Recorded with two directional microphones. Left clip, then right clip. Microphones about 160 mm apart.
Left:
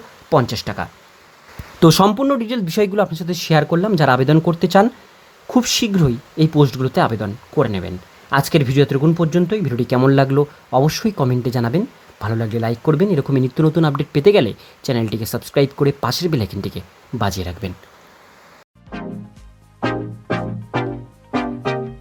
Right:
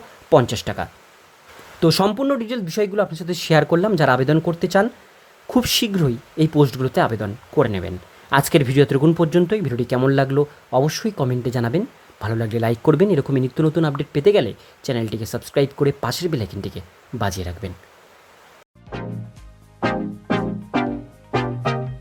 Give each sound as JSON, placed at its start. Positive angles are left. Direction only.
{"t": 0.3, "sound": "speech", "side_deg": -10}
{"t": 1.8, "sound": "speech", "side_deg": 10}